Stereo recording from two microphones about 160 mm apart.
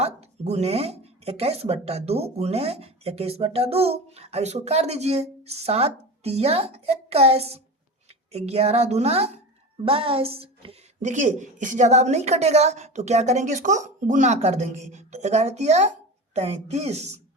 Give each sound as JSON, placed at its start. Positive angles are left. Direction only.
{"t": 0.0, "sound": "a woman's voice", "side_deg": -40}